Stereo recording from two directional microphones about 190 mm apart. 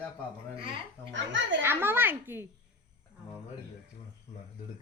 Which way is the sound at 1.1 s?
75° right (ahead or behind).